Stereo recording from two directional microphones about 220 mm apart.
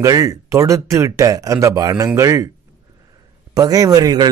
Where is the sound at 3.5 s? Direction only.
15° right (ahead or behind).